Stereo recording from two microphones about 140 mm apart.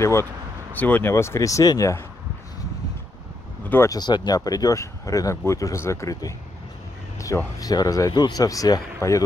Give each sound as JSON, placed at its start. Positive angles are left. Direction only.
{"t": 0.0, "sound": "speech", "side_deg": 20}
{"t": 3.6, "sound": "speech", "side_deg": 15}
{"t": 3.9, "sound": "speech", "side_deg": 30}